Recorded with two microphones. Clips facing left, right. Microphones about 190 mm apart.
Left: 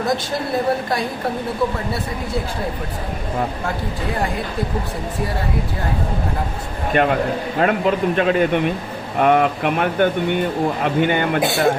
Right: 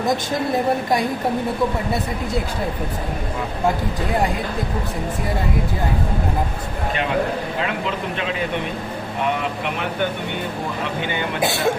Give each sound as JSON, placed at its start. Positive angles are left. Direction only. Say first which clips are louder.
{"t": 6.9, "sound": "speech", "louder": "left 5 dB", "side_deg": 50}
{"t": 11.4, "sound": "speech", "louder": "left 1 dB", "side_deg": 0}